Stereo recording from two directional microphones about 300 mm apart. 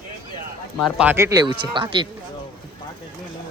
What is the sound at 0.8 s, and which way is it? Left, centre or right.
Speech, centre.